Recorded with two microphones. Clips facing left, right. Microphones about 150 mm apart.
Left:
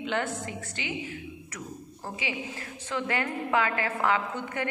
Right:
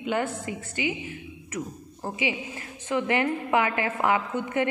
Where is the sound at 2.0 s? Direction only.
15° right (ahead or behind).